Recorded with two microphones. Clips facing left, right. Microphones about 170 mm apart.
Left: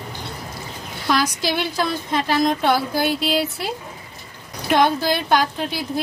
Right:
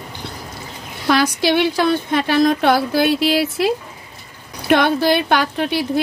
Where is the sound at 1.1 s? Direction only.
65° right (ahead or behind); by 3.7 s 80° right.